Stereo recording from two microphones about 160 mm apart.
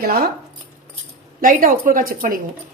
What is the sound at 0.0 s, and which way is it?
Speech, 70° right (ahead or behind).